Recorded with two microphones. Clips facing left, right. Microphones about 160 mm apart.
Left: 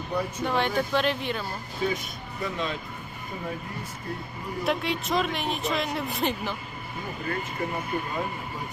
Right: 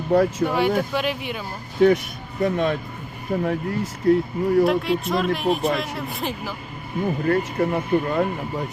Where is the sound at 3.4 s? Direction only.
70° right (ahead or behind).